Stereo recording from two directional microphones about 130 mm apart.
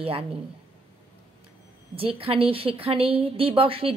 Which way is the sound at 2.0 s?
45° right (ahead or behind).